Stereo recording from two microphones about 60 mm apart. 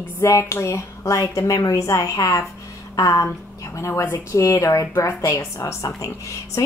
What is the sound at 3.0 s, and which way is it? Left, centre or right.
Speech, left.